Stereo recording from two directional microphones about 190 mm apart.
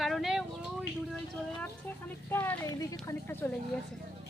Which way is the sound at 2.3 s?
10° left (ahead or behind).